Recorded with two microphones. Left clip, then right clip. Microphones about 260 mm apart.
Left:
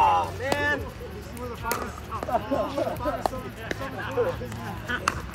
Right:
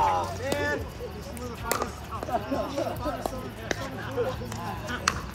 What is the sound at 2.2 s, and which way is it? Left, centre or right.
Speech, left.